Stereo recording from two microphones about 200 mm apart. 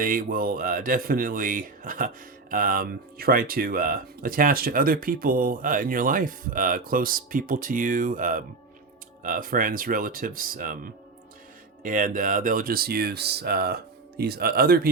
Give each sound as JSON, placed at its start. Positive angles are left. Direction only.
{"t": 0.0, "sound": "speech", "side_deg": -45}